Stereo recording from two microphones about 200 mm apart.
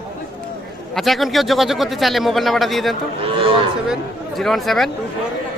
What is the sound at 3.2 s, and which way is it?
Speech, 25° right (ahead or behind).